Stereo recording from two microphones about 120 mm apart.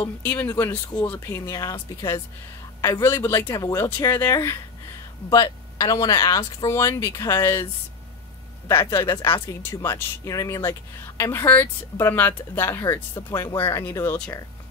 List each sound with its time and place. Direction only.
0.2 s a woman's voice: 20° left (ahead or behind)
8.6 s a woman's voice: 25° left (ahead or behind)
13.3 s a woman's voice: 35° left (ahead or behind)